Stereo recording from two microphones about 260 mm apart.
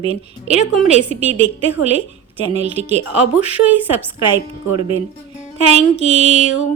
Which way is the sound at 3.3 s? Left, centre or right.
Centre.